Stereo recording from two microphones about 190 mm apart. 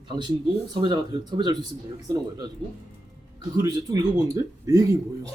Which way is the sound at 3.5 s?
20° right (ahead or behind).